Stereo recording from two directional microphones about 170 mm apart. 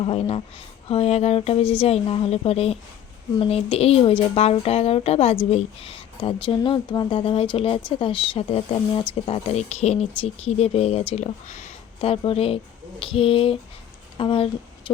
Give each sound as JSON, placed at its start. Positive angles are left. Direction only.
{"t": 0.0, "sound": "speech", "side_deg": 35}